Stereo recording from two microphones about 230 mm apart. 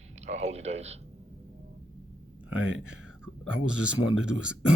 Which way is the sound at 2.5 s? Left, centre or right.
Centre.